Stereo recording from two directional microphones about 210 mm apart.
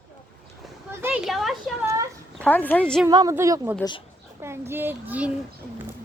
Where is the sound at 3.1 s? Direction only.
15° right (ahead or behind).